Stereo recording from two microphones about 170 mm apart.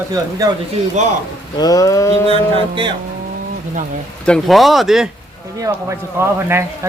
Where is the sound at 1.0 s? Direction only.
45° right (ahead or behind).